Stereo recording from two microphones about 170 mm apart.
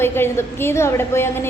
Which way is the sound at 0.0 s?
15° left (ahead or behind).